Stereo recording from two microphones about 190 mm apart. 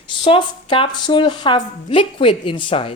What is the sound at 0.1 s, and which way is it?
A woman's voice, 25° left (ahead or behind).